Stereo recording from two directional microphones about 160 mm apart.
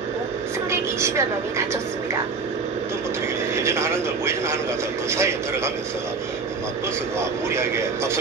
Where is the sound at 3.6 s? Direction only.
15° right (ahead or behind).